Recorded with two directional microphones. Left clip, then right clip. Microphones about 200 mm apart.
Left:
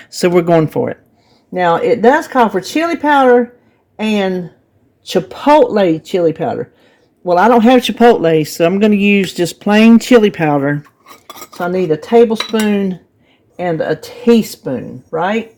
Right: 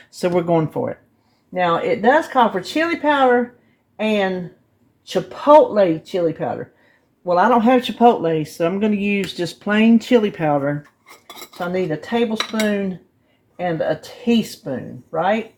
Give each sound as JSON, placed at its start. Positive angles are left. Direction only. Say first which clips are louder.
{"t": 0.1, "sound": "speech", "louder": "left 7 dB", "side_deg": 50}
{"t": 13.6, "sound": "speech", "louder": "left 5 dB", "side_deg": 55}